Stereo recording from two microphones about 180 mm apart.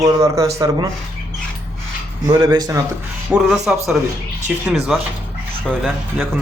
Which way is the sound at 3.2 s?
5° right (ahead or behind).